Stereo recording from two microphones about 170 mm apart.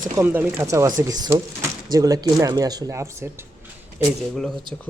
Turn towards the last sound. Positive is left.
turn(degrees=0)  # may be behind; listen again after turning